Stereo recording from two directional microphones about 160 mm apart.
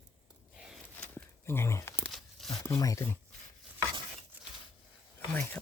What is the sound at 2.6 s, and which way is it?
Speech, 20° left (ahead or behind).